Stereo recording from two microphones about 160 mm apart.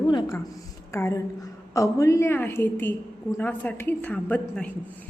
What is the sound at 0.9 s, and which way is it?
A woman's voice, 20° left (ahead or behind).